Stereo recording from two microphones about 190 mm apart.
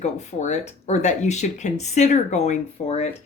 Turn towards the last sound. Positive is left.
turn(degrees=35)  # may be behind; listen again after turning